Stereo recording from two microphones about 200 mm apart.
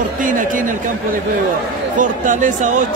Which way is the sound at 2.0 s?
40° right (ahead or behind).